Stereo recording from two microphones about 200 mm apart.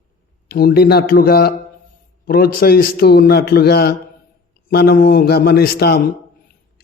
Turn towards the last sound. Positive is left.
turn(degrees=50)  # may be behind; listen again after turning